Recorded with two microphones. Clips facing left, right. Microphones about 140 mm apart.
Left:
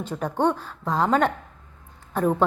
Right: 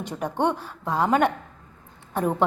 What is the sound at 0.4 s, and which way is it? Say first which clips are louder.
A woman's voice: left 2 dB; 10° right (ahead or behind).